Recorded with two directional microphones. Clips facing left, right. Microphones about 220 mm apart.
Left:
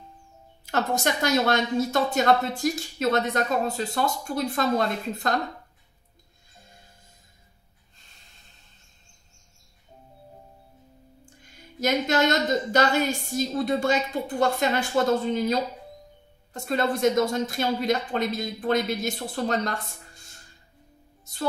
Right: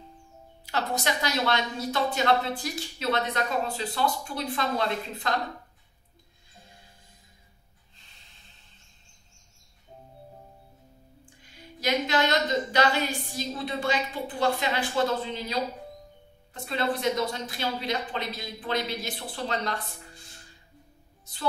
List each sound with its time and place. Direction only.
0.7 s speech: 45° left (ahead or behind)
11.8 s speech: 45° left (ahead or behind)